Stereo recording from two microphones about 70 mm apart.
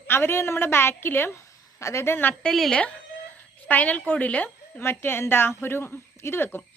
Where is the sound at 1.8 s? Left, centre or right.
Left.